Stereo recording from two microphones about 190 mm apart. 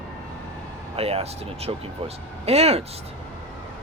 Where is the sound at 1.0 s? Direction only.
35° right (ahead or behind).